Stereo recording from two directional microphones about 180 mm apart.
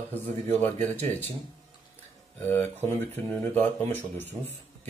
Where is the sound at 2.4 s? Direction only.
10° left (ahead or behind).